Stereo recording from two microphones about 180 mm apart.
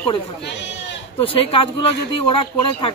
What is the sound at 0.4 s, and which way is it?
Speech, 75° left (ahead or behind).